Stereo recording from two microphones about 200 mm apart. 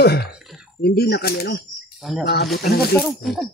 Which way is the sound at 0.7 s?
50° left (ahead or behind).